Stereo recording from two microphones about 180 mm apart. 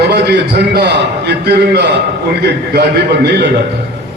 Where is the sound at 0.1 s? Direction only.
65° right (ahead or behind).